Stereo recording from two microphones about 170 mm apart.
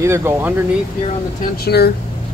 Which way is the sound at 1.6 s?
70° left (ahead or behind).